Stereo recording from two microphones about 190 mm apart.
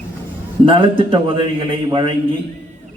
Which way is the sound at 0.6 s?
25° right (ahead or behind).